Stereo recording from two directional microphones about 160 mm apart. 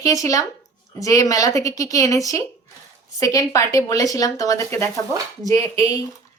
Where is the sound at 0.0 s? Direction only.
20° left (ahead or behind).